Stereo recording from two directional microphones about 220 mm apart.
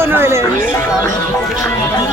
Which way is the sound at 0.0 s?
10° right (ahead or behind).